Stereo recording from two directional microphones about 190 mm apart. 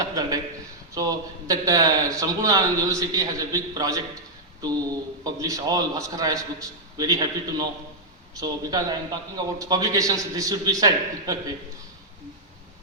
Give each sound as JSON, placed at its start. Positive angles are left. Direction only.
{"t": 0.0, "sound": "a man's voice", "side_deg": -20}